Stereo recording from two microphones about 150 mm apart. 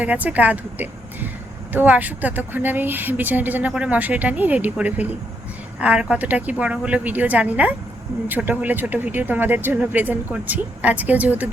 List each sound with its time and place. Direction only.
0.0 s a woman's voice: 10° right (ahead or behind)